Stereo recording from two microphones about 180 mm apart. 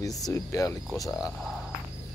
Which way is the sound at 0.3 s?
20° left (ahead or behind).